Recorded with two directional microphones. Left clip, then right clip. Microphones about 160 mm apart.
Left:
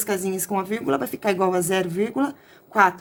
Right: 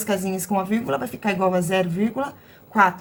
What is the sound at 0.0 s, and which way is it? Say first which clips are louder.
A woman's voice: right 1 dB; 40° left (ahead or behind).